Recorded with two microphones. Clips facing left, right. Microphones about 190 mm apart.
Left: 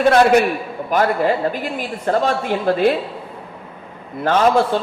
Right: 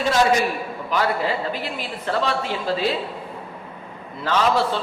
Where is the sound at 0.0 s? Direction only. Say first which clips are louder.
Left 6 dB; 60° left (ahead or behind).